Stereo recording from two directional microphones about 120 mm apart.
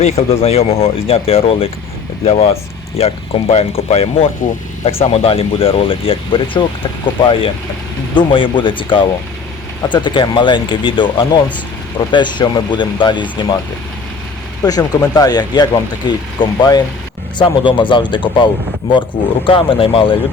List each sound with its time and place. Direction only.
0.0 s speech: 55° left (ahead or behind)
14.6 s speech: 30° left (ahead or behind)
19.5 s speech: 45° left (ahead or behind)